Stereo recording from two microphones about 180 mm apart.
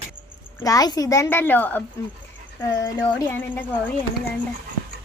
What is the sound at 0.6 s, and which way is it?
A child's voice, 20° left (ahead or behind).